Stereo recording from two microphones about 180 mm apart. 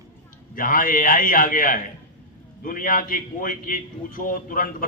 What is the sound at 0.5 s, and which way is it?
A man's voice, 50° left (ahead or behind).